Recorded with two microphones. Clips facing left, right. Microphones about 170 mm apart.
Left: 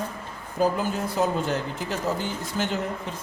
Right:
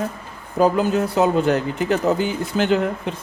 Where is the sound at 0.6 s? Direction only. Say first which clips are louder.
Right 6 dB; 90° right.